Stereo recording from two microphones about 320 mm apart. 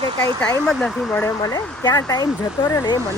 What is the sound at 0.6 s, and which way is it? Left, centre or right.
Speech, centre.